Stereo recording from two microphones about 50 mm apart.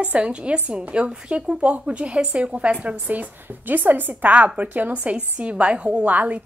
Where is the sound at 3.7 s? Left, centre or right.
Right.